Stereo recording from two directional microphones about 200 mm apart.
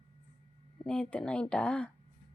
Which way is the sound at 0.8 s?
5° left (ahead or behind).